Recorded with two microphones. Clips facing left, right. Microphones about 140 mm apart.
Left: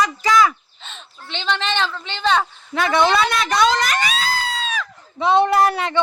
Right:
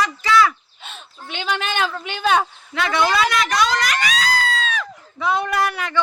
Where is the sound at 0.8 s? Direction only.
10° right (ahead or behind).